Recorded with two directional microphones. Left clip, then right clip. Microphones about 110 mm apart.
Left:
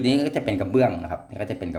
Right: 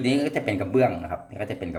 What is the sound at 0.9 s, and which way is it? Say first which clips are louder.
Speech: left 1 dB; 30° left (ahead or behind).